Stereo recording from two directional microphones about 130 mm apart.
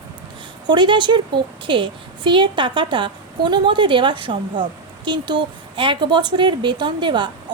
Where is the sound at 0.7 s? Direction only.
35° right (ahead or behind).